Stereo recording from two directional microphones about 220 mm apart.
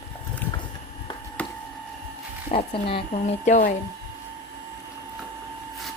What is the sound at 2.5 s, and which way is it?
Speech, 25° left (ahead or behind).